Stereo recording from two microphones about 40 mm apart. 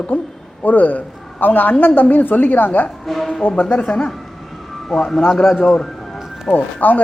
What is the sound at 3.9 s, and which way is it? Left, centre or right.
A man's voice, centre.